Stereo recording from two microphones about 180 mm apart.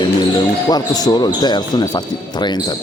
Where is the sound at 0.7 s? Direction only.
20° left (ahead or behind).